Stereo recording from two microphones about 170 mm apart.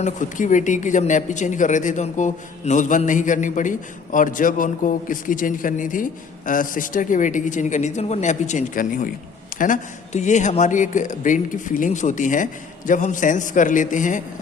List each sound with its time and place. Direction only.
0.0 s speech: 45° left (ahead or behind)